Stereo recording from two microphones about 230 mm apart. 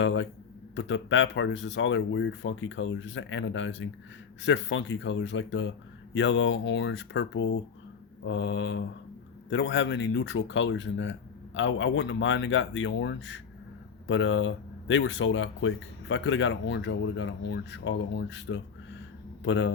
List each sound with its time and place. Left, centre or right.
0.0 s speech: left